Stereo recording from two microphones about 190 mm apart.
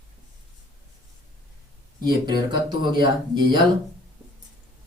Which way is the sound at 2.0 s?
20° right (ahead or behind).